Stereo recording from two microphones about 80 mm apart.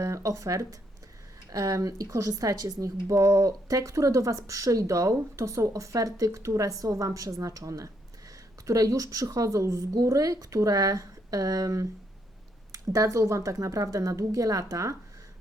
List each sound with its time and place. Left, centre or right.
0.0 s speech: right